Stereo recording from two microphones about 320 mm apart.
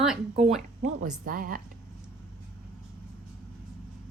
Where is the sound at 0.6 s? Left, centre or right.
Right.